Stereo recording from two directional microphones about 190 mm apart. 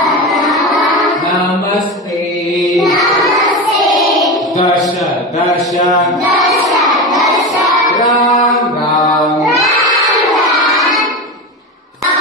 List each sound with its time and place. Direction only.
0.3 s music: centre (ahead or behind)
2.6 s music: centre (ahead or behind)
4.0 s a sound: centre (ahead or behind)
8.0 s mantra: 20° left (ahead or behind)